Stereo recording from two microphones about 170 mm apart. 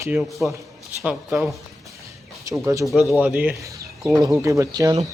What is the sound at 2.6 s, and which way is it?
Speech, 20° right (ahead or behind).